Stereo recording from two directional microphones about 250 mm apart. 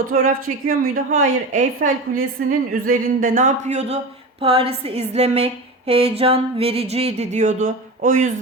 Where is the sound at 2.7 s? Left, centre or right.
Right.